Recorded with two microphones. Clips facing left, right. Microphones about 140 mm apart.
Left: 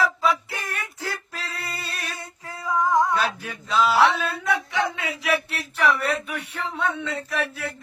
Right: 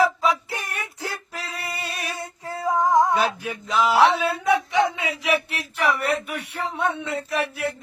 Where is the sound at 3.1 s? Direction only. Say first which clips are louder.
Right 2 dB; 15° right (ahead or behind).